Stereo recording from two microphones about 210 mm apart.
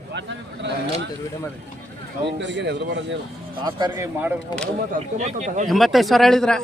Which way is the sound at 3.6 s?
20° right (ahead or behind).